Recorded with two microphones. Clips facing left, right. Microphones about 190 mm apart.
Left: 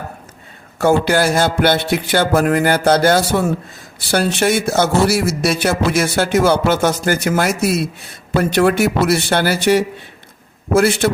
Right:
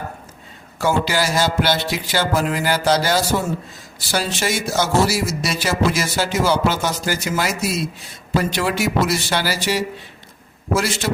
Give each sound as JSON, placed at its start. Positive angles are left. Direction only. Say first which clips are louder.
{"t": 0.8, "sound": "speech", "louder": "left 6 dB", "side_deg": 55}